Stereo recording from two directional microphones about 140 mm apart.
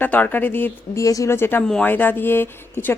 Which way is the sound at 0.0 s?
10° left (ahead or behind).